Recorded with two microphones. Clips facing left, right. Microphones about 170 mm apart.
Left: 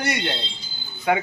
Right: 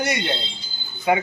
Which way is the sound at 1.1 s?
5° right (ahead or behind).